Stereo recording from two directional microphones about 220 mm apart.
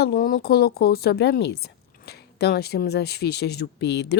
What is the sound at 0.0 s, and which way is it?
A woman's voice, 40° left (ahead or behind).